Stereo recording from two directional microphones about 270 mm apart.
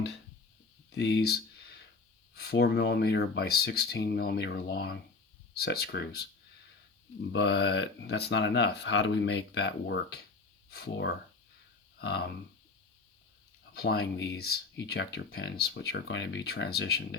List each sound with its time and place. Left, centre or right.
0.9 s a sound: left
2.3 s speech: left
13.7 s speech: left